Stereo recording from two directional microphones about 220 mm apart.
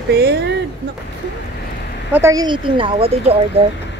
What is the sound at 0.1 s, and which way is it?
Speech, 50° right (ahead or behind).